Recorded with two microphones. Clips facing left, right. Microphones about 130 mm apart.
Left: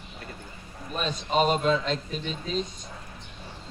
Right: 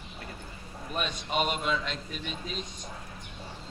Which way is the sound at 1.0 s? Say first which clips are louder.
Left 6 dB; 35° left (ahead or behind).